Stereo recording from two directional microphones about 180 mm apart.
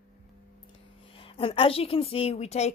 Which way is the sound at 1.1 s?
30° left (ahead or behind).